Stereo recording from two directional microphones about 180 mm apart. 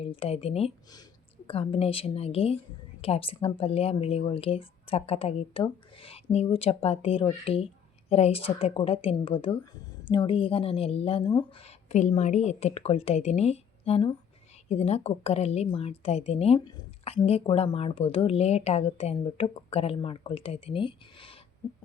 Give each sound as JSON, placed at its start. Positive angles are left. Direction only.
{"t": 0.0, "sound": "speech", "side_deg": 30}